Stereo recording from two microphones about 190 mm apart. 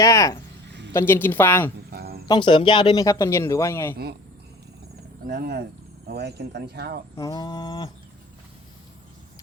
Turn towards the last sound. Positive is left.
turn(degrees=20)  # may be behind; listen again after turning